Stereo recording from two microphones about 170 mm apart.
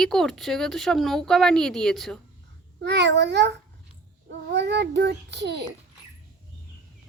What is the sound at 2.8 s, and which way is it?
A child's voice, 90° right.